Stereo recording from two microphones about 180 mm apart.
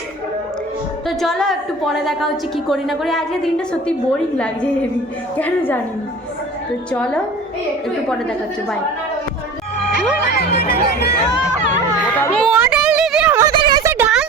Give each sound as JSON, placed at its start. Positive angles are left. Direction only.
{"t": 1.0, "sound": "a woman's voice", "side_deg": 0}
{"t": 6.9, "sound": "a woman's voice", "side_deg": 5}
{"t": 10.2, "sound": "music", "side_deg": 60}
{"t": 11.9, "sound": "children playing", "side_deg": 10}
{"t": 12.5, "sound": "a sound", "side_deg": -5}
{"t": 13.5, "sound": "a sound", "side_deg": -25}